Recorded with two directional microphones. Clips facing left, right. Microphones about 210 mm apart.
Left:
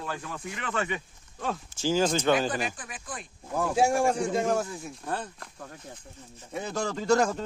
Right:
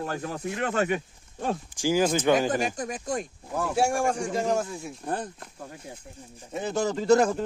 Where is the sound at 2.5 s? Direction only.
45° right (ahead or behind).